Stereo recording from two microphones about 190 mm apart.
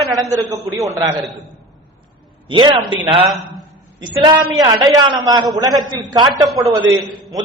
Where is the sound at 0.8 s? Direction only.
15° right (ahead or behind).